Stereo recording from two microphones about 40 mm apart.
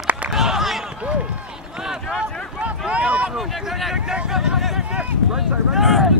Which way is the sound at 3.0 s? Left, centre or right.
Right.